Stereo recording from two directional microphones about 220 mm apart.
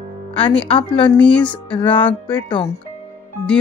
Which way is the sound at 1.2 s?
5° left (ahead or behind).